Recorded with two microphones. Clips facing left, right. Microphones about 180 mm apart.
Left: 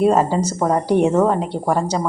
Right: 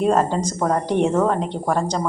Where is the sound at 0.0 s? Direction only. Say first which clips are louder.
Left 3 dB; 10° left (ahead or behind).